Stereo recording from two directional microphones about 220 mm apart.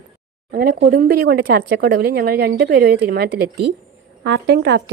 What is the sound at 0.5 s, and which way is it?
Speech, 45° right (ahead or behind).